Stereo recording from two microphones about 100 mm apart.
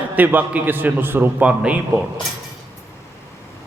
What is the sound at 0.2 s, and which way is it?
A man's voice, 15° right (ahead or behind).